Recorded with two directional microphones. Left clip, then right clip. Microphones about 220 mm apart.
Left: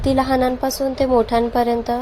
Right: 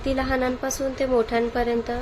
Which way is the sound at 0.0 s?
25° left (ahead or behind).